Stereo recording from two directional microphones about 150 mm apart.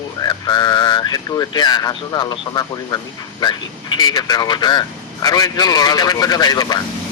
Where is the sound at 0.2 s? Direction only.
25° left (ahead or behind).